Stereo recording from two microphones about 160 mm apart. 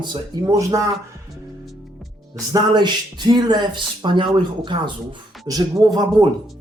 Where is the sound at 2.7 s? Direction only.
30° right (ahead or behind).